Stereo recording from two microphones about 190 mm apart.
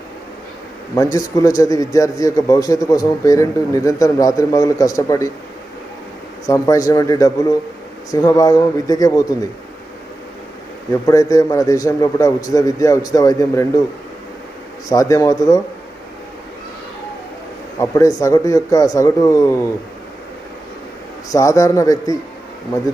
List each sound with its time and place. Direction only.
0.9 s a man's voice: 20° left (ahead or behind)
6.4 s a man's voice: 15° left (ahead or behind)
11.0 s a man's voice: 15° left (ahead or behind)
14.8 s a man's voice: 15° left (ahead or behind)
17.7 s a man's voice: 15° left (ahead or behind)
21.2 s a man's voice: 15° left (ahead or behind)